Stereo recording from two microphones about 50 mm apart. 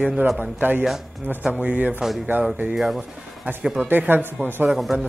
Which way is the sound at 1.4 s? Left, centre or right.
Centre.